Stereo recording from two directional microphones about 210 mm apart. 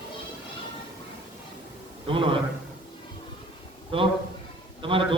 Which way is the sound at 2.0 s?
25° right (ahead or behind).